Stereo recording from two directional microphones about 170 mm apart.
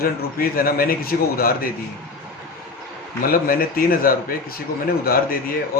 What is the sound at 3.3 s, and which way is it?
A man's voice, 55° left (ahead or behind).